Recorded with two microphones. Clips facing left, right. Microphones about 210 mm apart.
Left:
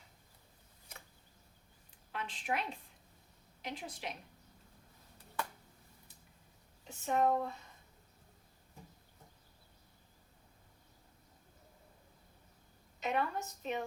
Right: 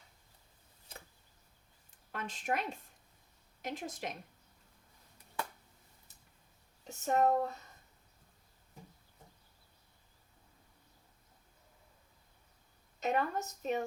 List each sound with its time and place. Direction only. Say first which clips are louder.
2.1 s a woman's voice: right 2 dB; 45° right (ahead or behind)
6.8 s speech: right 2 dB; 40° right (ahead or behind)
13.0 s a woman's voice: right 2 dB; 45° right (ahead or behind)